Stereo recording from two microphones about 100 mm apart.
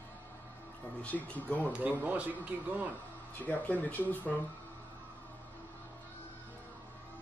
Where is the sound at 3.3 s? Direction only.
15° left (ahead or behind).